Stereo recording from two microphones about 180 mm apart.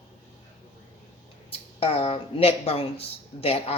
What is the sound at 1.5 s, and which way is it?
A child's voice, 30° left (ahead or behind).